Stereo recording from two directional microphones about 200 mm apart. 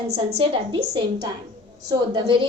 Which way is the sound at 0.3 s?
25° right (ahead or behind).